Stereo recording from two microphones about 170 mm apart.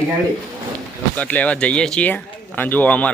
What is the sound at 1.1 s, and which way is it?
A man's voice, 10° left (ahead or behind).